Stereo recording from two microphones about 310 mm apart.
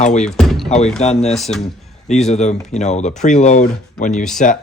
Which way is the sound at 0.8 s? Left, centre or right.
Centre.